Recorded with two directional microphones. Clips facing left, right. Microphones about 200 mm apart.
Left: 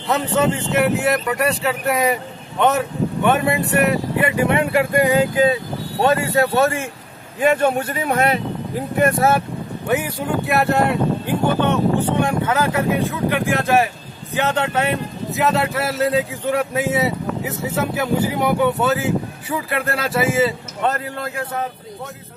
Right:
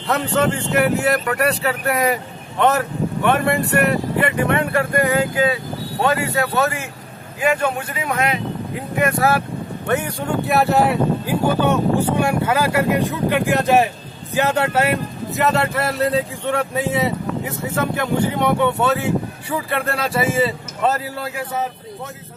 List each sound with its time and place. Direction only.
0.0 s speech: centre (ahead or behind)
4.5 s speech: 15° left (ahead or behind)
6.0 s a man's voice: 30° left (ahead or behind)
9.8 s speech: 5° left (ahead or behind)